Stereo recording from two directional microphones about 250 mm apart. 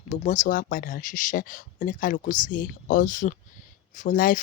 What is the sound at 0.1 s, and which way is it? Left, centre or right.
Speech, left.